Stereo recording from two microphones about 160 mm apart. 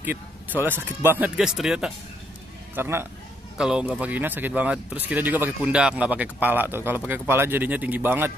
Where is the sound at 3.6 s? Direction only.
5° right (ahead or behind).